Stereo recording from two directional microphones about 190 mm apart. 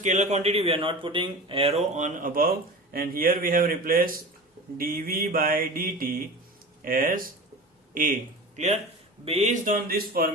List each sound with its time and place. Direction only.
0.0 s speech: 40° right (ahead or behind)
4.8 s mantra: 50° right (ahead or behind)
7.9 s a man's voice: 45° right (ahead or behind)
9.2 s mantra: 35° right (ahead or behind); by 10.3 s 50° right (ahead or behind)